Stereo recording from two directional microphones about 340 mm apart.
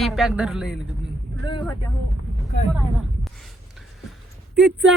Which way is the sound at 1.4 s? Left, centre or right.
Centre.